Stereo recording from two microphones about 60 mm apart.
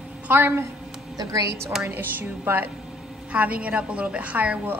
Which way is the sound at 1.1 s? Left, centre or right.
Right.